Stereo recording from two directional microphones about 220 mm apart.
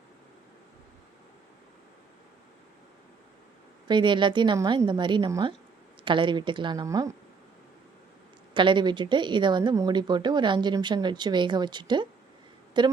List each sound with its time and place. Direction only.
3.8 s speech: 20° right (ahead or behind)
8.5 s speech: 20° right (ahead or behind)